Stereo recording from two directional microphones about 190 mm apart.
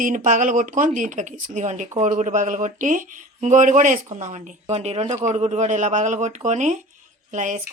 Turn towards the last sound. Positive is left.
turn(degrees=-40)  # may be behind; listen again after turning